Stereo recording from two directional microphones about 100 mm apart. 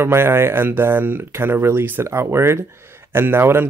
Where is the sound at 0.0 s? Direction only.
25° right (ahead or behind).